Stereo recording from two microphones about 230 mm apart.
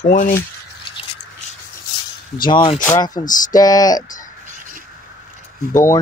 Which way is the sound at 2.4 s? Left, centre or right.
Centre.